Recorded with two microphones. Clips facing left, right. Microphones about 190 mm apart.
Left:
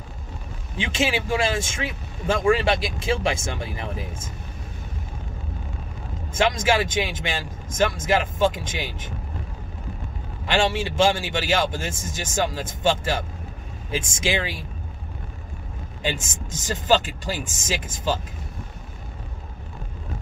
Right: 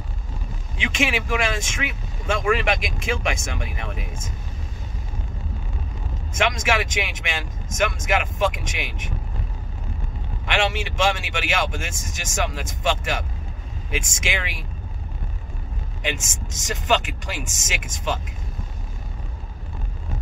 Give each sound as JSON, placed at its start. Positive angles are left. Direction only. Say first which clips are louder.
{"t": 0.7, "sound": "speech", "louder": "left 1 dB", "side_deg": 30}
{"t": 6.3, "sound": "speech", "louder": "left 2 dB", "side_deg": 30}
{"t": 10.4, "sound": "speech", "louder": "left 2 dB", "side_deg": 30}
{"t": 16.0, "sound": "speech", "louder": "left 1 dB", "side_deg": 30}